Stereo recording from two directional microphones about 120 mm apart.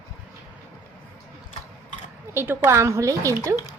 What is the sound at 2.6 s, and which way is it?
Speech, 25° right (ahead or behind).